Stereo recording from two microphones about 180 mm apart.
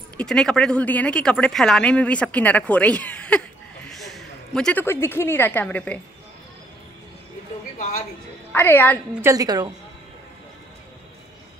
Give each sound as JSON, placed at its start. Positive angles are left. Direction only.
{"t": 0.2, "sound": "speech", "side_deg": 5}
{"t": 8.5, "sound": "a woman's voice", "side_deg": 10}
{"t": 9.1, "sound": "a woman's voice", "side_deg": -15}